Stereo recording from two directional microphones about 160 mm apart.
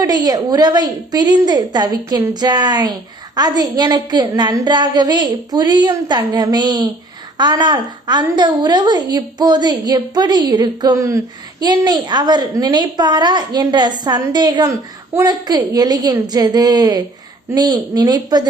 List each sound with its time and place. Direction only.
0.0 s a woman's voice: 25° right (ahead or behind)